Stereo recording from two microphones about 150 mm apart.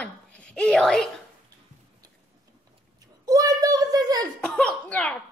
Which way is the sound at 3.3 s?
25° right (ahead or behind).